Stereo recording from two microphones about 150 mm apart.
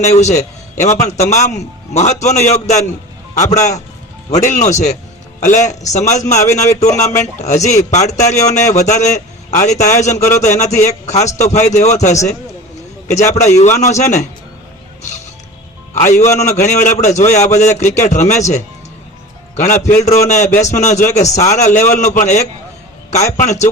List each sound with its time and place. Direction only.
0.0 s a man's voice: 50° left (ahead or behind)
16.0 s a man's voice: 55° left (ahead or behind)